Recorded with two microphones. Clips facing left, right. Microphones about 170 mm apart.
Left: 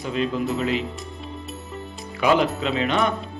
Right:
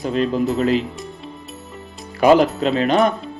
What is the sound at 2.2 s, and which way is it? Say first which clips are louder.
Speech: right 6 dB; 45° right (ahead or behind).